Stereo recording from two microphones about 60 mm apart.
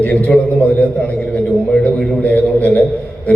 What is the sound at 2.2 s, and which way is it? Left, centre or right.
Speech, left.